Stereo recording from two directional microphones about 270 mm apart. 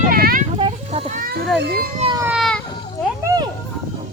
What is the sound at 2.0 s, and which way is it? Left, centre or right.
Baby cry, centre.